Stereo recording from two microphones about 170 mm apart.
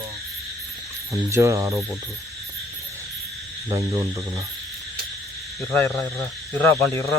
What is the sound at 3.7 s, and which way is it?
Speech, 15° right (ahead or behind).